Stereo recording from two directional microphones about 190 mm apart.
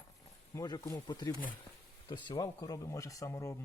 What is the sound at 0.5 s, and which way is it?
Speech, 20° left (ahead or behind).